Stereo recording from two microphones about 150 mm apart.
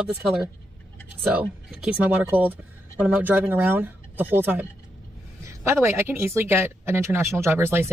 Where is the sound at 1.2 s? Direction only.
10° right (ahead or behind).